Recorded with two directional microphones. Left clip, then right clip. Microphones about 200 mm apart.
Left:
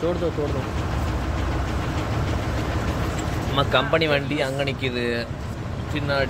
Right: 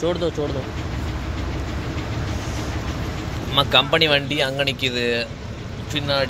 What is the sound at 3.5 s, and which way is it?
Speech, centre (ahead or behind).